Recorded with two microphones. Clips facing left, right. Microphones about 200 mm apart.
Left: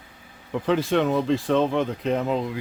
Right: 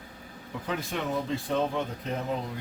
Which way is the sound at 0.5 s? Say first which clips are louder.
Left 11 dB; 85° left.